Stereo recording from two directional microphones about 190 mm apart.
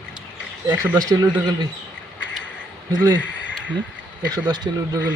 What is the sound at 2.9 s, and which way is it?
Speech, 20° right (ahead or behind).